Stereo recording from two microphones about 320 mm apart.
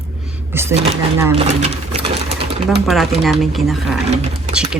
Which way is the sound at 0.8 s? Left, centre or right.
Centre.